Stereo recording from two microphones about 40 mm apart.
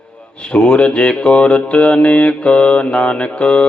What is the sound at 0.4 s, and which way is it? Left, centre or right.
Speech, left.